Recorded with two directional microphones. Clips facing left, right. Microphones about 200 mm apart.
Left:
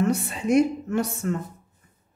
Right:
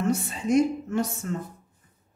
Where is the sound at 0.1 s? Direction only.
65° left (ahead or behind).